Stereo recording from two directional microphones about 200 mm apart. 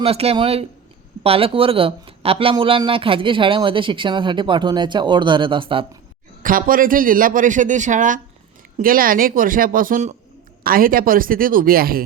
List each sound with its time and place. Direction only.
0.0 s speech: 30° right (ahead or behind)
6.4 s a man's voice: 45° right (ahead or behind)